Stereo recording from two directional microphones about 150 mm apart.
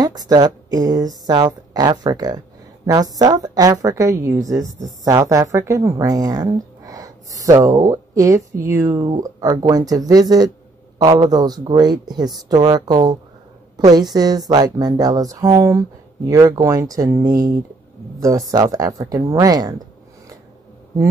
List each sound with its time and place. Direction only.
0.0 s a woman's voice: 25° right (ahead or behind)